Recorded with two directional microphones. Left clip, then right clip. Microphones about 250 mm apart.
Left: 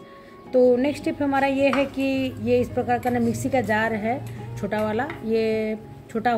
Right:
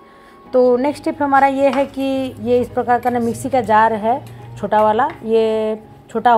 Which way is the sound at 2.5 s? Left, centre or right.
Centre.